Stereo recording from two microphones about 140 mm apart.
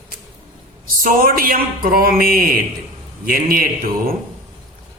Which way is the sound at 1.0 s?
85° right.